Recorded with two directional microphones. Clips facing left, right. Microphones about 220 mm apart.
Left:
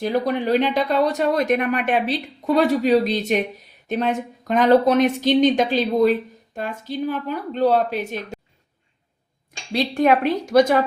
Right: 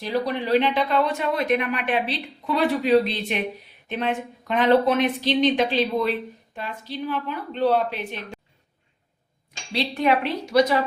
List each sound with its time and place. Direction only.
0.0 s speech: 50° left (ahead or behind)
9.7 s speech: 45° left (ahead or behind)